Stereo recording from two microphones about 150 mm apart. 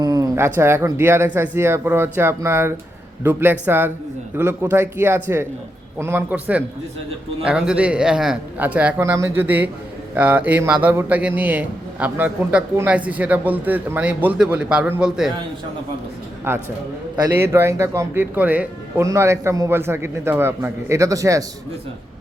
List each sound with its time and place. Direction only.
0.0 s speech: 25° right (ahead or behind); by 15.3 s 5° right (ahead or behind)
16.5 s speech: 15° right (ahead or behind)